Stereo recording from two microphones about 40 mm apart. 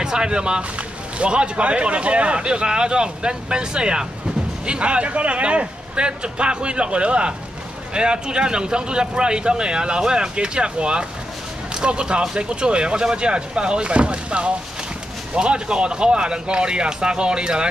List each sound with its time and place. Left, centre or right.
0.0 s speech: centre